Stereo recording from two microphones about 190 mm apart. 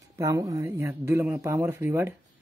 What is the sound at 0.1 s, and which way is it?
Speech, 15° right (ahead or behind).